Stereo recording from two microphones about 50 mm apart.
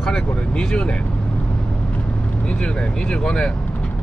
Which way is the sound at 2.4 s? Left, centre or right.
Centre.